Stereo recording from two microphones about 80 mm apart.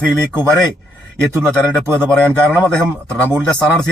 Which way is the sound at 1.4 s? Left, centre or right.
Centre.